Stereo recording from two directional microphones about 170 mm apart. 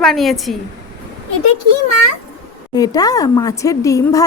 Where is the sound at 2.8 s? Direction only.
20° left (ahead or behind).